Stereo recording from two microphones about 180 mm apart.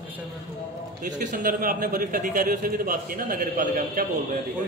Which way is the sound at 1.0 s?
45° right (ahead or behind).